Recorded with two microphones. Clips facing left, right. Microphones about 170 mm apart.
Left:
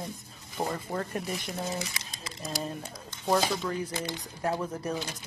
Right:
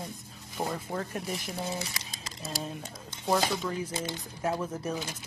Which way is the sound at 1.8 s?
35° right (ahead or behind).